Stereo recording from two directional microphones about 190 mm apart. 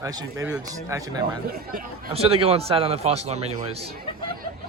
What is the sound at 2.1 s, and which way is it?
A man's voice, 30° right (ahead or behind).